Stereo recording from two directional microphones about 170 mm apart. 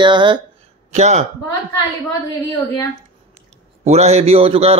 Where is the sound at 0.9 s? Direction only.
40° right (ahead or behind).